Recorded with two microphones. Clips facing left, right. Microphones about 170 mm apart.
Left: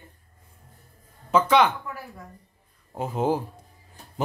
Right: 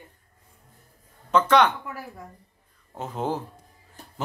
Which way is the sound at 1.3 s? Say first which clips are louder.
Even; 5° left (ahead or behind).